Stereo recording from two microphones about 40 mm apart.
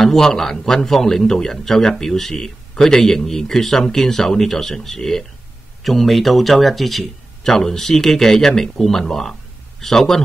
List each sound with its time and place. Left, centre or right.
0.0 s speech: centre
7.4 s speech: centre